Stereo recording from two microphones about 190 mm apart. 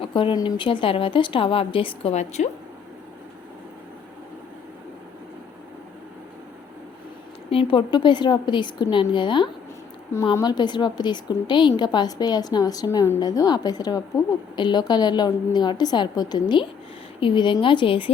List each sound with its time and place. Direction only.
0.0 s a woman's voice: 25° left (ahead or behind)
7.5 s a woman's voice: 25° left (ahead or behind)